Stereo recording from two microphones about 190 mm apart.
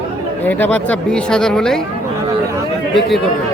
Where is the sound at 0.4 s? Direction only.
10° left (ahead or behind).